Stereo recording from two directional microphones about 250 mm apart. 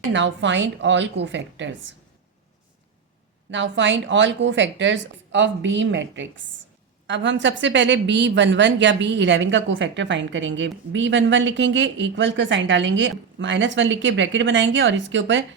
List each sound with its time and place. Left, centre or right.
0.1 s a woman's voice: right
3.5 s a woman's voice: right